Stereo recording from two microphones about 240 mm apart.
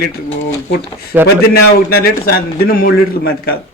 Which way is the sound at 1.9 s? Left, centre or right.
Left.